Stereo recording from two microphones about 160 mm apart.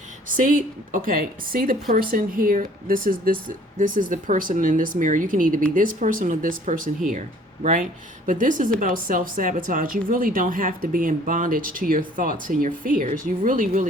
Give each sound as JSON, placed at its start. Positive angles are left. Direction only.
{"t": 0.3, "sound": "speech", "side_deg": -55}